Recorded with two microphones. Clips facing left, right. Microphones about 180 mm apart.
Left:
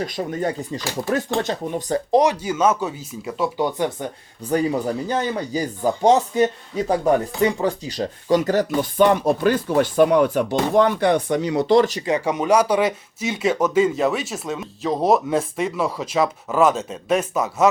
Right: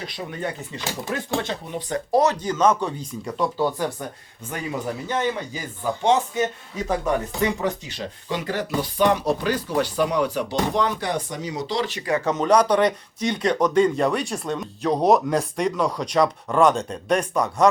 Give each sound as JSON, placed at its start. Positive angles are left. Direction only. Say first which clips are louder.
{"t": 0.0, "sound": "speech", "louder": "left 6 dB", "side_deg": 45}
{"t": 2.1, "sound": "speech", "louder": "left 2 dB", "side_deg": 15}
{"t": 3.6, "sound": "speech", "louder": "left 2 dB", "side_deg": 20}
{"t": 5.0, "sound": "speech", "louder": "left 2 dB", "side_deg": 35}
{"t": 12.0, "sound": "speech", "louder": "left 1 dB", "side_deg": 15}